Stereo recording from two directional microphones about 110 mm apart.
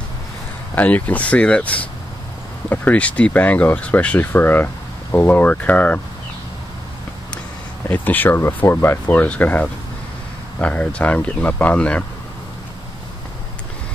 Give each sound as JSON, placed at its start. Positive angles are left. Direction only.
{"t": 0.7, "sound": "speech", "side_deg": 15}
{"t": 7.9, "sound": "speech", "side_deg": 15}